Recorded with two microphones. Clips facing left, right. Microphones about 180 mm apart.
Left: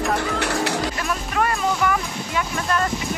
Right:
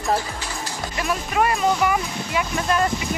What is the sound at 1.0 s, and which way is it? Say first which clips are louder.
Speech: right 2 dB; 10° right (ahead or behind).